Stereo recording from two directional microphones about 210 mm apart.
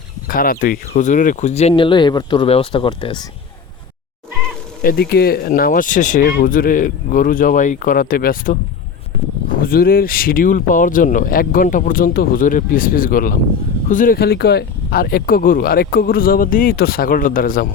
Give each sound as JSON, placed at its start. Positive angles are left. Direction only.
{"t": 0.3, "sound": "speech", "side_deg": 40}
{"t": 4.8, "sound": "speech", "side_deg": 45}
{"t": 9.6, "sound": "speech", "side_deg": 45}